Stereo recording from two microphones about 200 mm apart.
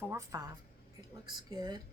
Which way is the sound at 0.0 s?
15° right (ahead or behind).